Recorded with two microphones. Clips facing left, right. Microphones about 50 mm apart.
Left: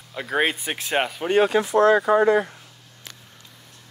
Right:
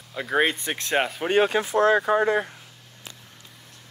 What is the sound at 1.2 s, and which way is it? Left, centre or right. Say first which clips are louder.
Speech: left 3 dB; right.